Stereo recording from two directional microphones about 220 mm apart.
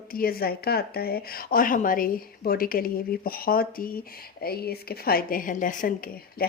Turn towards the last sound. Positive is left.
turn(degrees=40)  # may be behind; listen again after turning